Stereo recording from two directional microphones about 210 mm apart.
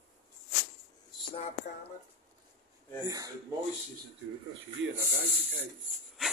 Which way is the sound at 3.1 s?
15° right (ahead or behind).